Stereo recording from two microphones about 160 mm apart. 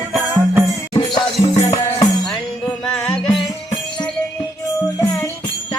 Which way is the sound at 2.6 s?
5° left (ahead or behind).